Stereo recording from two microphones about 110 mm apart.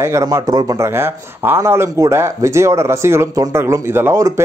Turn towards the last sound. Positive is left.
turn(degrees=-20)  # may be behind; listen again after turning